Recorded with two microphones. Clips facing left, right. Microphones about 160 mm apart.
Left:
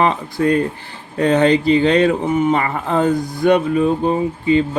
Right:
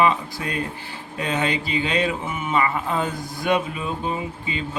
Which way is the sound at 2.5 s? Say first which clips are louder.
Left 5 dB; 60° left (ahead or behind).